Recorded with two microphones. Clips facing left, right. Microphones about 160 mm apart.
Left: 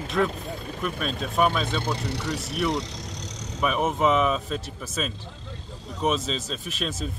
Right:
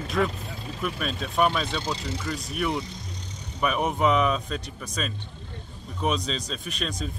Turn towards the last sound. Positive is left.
turn(degrees=0)  # may be behind; listen again after turning